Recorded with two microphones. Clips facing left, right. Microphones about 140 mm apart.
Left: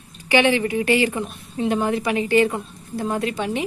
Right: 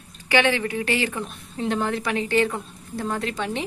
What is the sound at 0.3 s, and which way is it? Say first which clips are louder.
A woman's voice: left 3 dB; 15° left (ahead or behind).